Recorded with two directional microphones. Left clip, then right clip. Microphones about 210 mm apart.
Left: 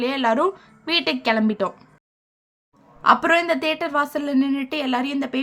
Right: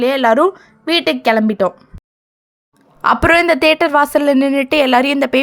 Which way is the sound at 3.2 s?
45° right (ahead or behind).